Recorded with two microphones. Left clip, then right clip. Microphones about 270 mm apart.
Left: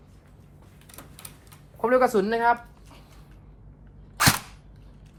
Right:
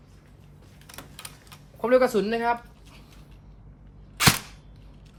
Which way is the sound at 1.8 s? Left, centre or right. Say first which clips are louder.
Even; centre.